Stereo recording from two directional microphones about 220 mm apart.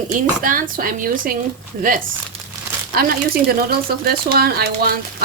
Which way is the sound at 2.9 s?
45° right (ahead or behind).